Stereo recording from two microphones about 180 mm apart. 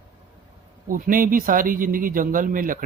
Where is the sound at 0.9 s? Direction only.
50° right (ahead or behind).